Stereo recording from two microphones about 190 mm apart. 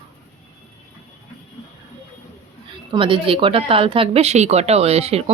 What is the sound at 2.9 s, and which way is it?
A woman's voice, 25° right (ahead or behind).